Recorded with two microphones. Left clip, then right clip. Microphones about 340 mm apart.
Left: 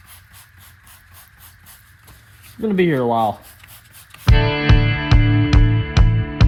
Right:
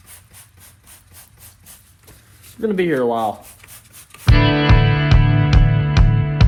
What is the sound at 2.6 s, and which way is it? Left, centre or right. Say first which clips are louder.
Speech: even; left.